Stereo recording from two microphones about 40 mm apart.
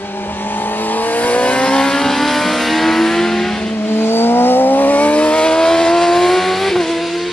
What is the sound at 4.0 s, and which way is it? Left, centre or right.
Vehicle, left.